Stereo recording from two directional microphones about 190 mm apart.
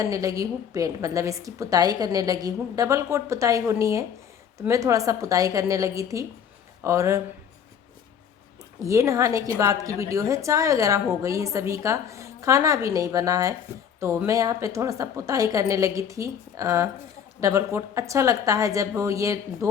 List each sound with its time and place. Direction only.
0.0 s a woman's voice: 15° right (ahead or behind)
8.8 s a woman's voice: 15° right (ahead or behind)